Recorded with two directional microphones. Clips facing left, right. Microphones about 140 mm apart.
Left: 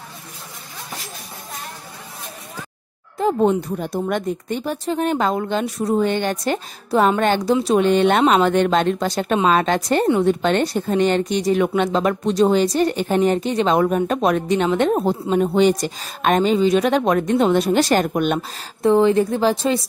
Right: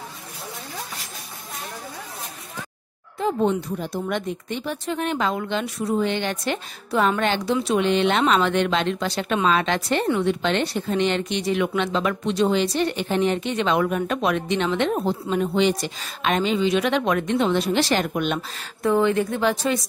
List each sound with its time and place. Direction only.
3.2 s a woman's voice: 40° left (ahead or behind)
15.5 s a woman's voice: 45° left (ahead or behind)
18.8 s speech: 30° left (ahead or behind)